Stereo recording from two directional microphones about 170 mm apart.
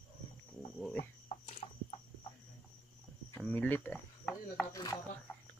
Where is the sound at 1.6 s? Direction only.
40° left (ahead or behind).